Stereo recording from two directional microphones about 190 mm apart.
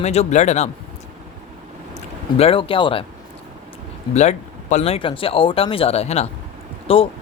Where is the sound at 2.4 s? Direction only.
30° left (ahead or behind).